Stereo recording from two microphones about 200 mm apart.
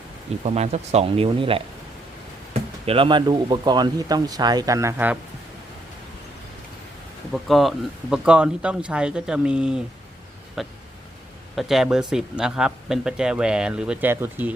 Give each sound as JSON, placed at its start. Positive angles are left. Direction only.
{"t": 0.4, "sound": "speech", "side_deg": -35}
{"t": 7.3, "sound": "speech", "side_deg": 0}